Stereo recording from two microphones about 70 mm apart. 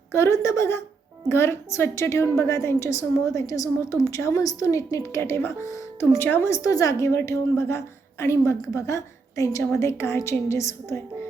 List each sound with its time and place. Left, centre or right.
0.1 s a woman's voice: left
5.7 s speech: left
6.1 s a woman's voice: left
6.5 s speech: left
7.1 s a woman's voice: left